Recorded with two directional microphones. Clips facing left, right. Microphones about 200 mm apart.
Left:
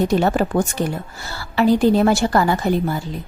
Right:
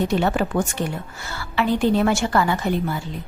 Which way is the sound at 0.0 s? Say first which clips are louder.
Left 3 dB; 40° left (ahead or behind).